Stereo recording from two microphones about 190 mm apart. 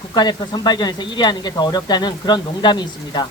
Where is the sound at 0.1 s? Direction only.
20° left (ahead or behind).